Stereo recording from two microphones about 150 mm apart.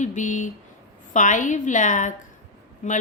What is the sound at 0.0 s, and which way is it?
A woman's voice, 55° left (ahead or behind).